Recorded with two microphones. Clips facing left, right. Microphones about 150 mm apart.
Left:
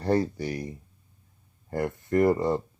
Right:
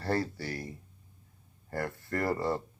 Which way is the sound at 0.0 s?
20° left (ahead or behind).